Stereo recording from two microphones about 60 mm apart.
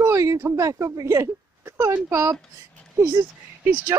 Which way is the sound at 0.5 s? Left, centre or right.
Right.